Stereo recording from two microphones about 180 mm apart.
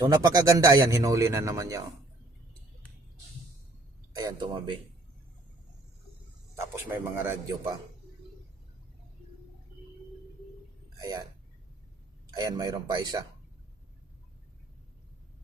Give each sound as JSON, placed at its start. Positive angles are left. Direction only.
{"t": 0.0, "sound": "a man's voice", "side_deg": -20}
{"t": 4.1, "sound": "a man's voice", "side_deg": -20}
{"t": 6.6, "sound": "a man's voice", "side_deg": -15}
{"t": 11.0, "sound": "speech", "side_deg": -20}
{"t": 12.3, "sound": "a man's voice", "side_deg": -20}